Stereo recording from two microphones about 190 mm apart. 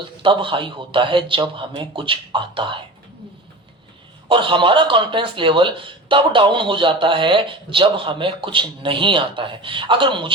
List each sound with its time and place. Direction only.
0.0 s speech: 25° right (ahead or behind)
4.3 s speech: 25° right (ahead or behind)